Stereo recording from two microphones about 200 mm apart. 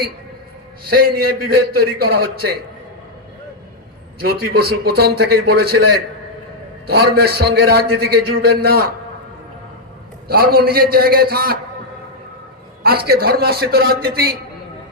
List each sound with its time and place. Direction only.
0.9 s a man's voice: 50° right (ahead or behind)
4.2 s a man's voice: 50° right (ahead or behind)
10.2 s a man's voice: 50° right (ahead or behind)
12.8 s a man's voice: 50° right (ahead or behind)